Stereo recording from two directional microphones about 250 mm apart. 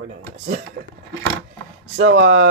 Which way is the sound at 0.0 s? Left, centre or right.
Right.